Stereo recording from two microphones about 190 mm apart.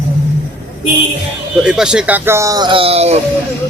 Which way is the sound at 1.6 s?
5° right (ahead or behind).